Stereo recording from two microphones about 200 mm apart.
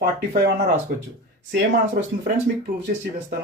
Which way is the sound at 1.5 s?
50° right (ahead or behind).